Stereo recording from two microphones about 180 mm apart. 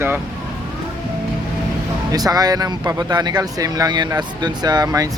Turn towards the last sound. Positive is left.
turn(degrees=-20)  # may be behind; listen again after turning